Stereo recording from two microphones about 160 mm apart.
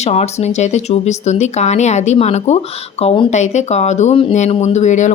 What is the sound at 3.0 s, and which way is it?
Speech, 35° left (ahead or behind).